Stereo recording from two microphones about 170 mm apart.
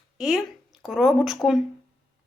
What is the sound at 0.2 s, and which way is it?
A woman's voice, centre (ahead or behind).